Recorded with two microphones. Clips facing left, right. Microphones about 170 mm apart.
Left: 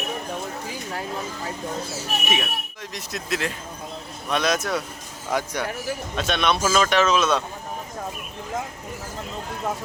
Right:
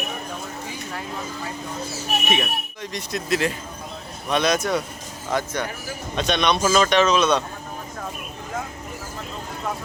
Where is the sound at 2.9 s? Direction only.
Centre (ahead or behind).